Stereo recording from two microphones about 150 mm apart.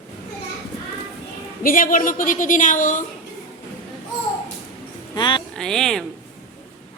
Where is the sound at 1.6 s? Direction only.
65° left (ahead or behind).